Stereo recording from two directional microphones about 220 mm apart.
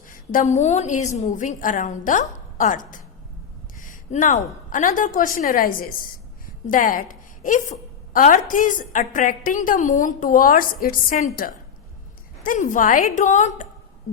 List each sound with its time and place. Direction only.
0.1 s a woman's voice: 40° left (ahead or behind)
12.4 s a woman's voice: 40° left (ahead or behind)